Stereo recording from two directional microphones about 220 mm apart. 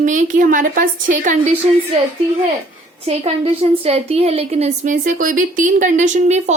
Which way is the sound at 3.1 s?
25° right (ahead or behind).